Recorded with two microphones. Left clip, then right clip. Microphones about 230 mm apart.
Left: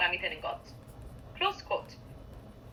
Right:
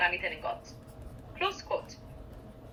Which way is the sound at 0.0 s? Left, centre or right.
Centre.